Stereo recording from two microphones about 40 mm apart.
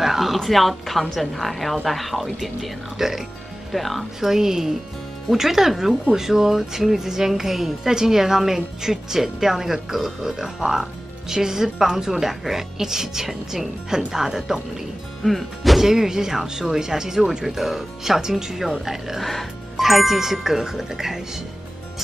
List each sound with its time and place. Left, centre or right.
0.0 s a sound: centre
0.4 s a woman's voice: centre
3.0 s speech: centre
3.7 s a woman's voice: centre
4.2 s speech: centre
15.2 s speech: centre